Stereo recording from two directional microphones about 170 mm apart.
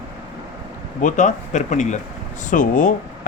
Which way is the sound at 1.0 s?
45° left (ahead or behind).